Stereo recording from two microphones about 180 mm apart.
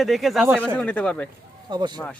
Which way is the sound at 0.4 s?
10° right (ahead or behind).